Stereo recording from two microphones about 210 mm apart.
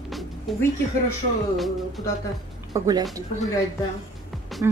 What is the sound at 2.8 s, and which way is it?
Speech, 15° right (ahead or behind).